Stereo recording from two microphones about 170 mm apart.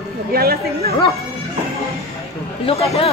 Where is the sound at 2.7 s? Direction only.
35° left (ahead or behind).